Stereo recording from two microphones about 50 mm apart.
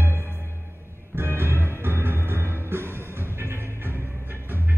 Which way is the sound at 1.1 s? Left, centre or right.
Right.